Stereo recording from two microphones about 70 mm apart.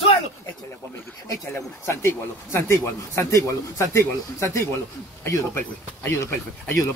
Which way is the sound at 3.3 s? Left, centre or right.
Left.